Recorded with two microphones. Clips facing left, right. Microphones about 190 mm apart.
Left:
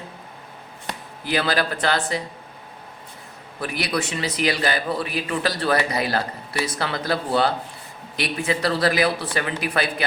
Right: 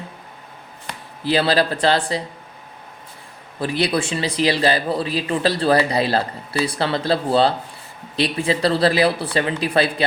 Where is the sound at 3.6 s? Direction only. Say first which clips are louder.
Right 5 dB; 30° right (ahead or behind).